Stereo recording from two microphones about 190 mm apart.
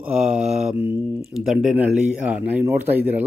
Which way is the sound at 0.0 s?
5° right (ahead or behind).